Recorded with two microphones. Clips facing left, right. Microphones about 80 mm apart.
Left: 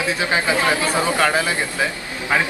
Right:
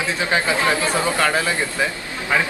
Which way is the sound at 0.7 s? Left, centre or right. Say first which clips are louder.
Even; right.